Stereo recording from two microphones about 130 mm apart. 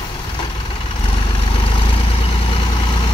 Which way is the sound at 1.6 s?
45° left (ahead or behind).